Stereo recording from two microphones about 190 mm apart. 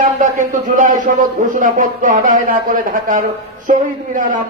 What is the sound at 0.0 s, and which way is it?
A man's voice, 40° right (ahead or behind).